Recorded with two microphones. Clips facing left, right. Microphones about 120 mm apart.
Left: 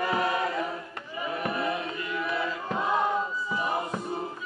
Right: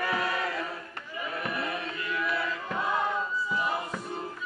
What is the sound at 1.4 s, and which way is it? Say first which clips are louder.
Chant: left 4 dB; 25° left (ahead or behind).